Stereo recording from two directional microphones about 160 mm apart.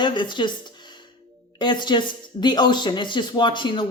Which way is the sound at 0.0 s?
30° left (ahead or behind).